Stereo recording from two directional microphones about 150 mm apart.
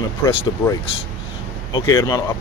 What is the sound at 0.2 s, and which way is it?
Speech, 15° left (ahead or behind).